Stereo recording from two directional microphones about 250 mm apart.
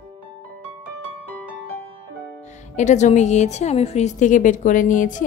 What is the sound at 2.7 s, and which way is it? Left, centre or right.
A woman's voice, left.